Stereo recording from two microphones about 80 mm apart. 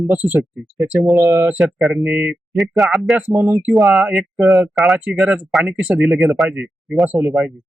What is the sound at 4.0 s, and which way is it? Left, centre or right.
Speech, centre.